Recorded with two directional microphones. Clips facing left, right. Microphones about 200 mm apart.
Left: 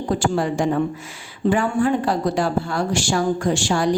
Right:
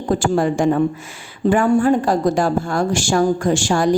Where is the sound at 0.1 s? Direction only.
50° right (ahead or behind).